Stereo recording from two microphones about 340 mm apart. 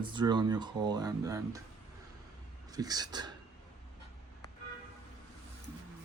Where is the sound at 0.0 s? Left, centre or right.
Centre.